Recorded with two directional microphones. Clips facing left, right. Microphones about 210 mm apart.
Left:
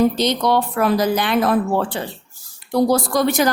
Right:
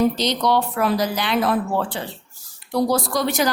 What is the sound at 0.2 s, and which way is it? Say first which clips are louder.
A woman's voice: left 2 dB; 50° left (ahead or behind).